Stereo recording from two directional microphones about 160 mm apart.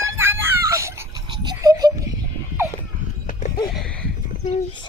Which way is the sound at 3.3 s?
60° left (ahead or behind).